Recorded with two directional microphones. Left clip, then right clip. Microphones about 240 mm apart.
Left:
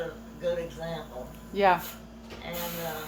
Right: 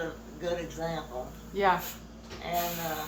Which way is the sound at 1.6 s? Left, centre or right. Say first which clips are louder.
Left 3 dB; left.